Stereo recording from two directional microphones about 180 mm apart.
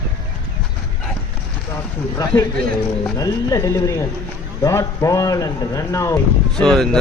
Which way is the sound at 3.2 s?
20° left (ahead or behind).